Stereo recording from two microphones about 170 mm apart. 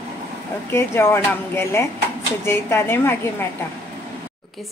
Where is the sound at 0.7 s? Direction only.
15° left (ahead or behind).